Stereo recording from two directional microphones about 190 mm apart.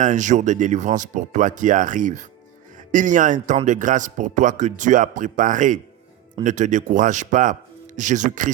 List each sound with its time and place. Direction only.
0.0 s speech: 40° right (ahead or behind)